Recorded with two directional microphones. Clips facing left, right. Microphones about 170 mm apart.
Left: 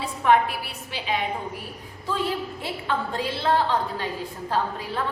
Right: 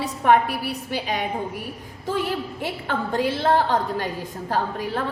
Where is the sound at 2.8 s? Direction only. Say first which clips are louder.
Right 4 dB; 50° right (ahead or behind).